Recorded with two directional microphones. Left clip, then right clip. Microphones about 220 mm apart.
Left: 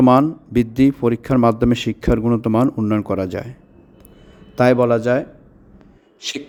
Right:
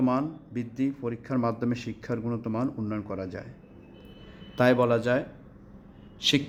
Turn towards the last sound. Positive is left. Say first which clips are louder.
# right 3 dB
turn(degrees=20)  # may be behind; listen again after turning